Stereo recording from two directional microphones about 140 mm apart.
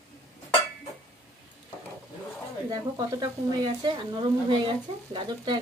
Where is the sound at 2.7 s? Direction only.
25° right (ahead or behind).